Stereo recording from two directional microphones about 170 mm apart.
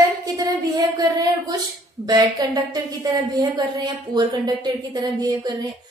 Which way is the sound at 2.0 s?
20° right (ahead or behind).